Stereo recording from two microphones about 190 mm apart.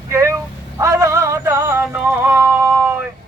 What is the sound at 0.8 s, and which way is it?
Music, 15° right (ahead or behind).